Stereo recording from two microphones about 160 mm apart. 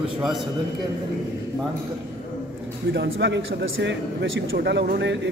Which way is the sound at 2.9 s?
90° right.